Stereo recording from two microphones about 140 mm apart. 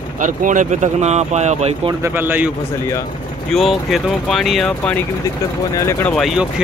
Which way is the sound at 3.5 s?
Centre (ahead or behind).